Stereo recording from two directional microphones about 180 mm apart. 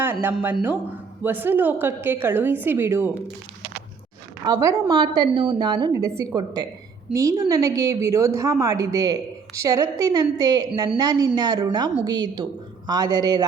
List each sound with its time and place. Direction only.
0.0 s a woman's voice: 10° right (ahead or behind)
4.4 s a woman's voice: 20° right (ahead or behind)